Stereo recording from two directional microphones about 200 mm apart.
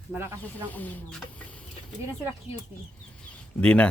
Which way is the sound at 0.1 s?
10° right (ahead or behind).